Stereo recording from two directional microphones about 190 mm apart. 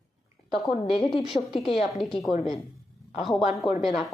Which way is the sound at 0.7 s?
30° left (ahead or behind).